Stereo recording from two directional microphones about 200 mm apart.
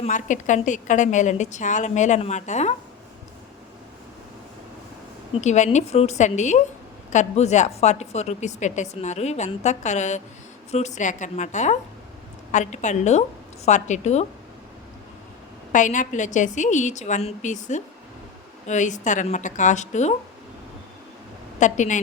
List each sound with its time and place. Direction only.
0.0 s a woman's voice: 40° left (ahead or behind)
5.4 s a woman's voice: 35° left (ahead or behind)
15.7 s a woman's voice: 40° left (ahead or behind)
21.6 s a woman's voice: 35° left (ahead or behind)